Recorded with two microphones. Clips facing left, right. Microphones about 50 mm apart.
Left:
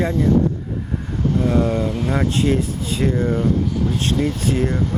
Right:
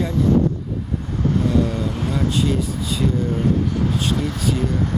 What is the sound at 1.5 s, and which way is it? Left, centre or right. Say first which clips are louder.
Speech: left 2 dB; left.